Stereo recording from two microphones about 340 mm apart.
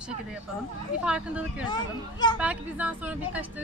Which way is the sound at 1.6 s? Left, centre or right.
Centre.